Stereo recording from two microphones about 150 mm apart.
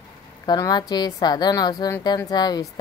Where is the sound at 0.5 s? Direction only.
30° left (ahead or behind).